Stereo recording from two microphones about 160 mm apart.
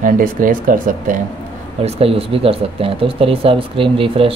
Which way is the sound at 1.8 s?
35° right (ahead or behind).